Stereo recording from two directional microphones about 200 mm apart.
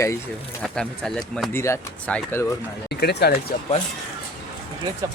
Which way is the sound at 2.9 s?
55° left (ahead or behind).